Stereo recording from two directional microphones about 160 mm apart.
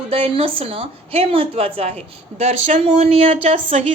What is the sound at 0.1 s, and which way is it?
A woman's voice, 35° right (ahead or behind).